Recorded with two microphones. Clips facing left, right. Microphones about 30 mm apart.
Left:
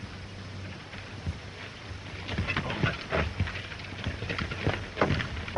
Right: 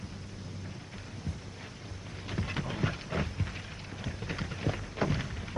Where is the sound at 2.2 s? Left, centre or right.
Left.